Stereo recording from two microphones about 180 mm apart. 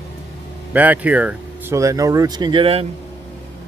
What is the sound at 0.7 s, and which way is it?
Speech, 10° right (ahead or behind).